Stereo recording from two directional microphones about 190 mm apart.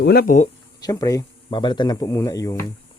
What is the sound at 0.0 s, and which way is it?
Speech, 55° left (ahead or behind).